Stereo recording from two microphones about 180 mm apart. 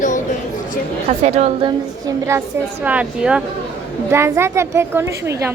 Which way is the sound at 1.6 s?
20° right (ahead or behind).